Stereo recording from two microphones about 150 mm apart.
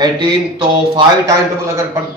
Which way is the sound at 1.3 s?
20° right (ahead or behind).